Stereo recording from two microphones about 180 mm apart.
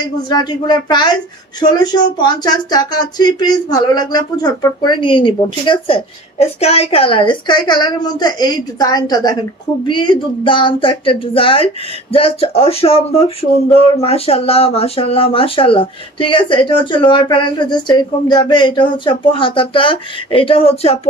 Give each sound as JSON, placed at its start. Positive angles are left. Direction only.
{"t": 0.3, "sound": "speech", "side_deg": 20}